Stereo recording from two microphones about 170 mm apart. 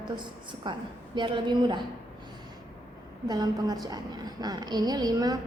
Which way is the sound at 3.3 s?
25° right (ahead or behind).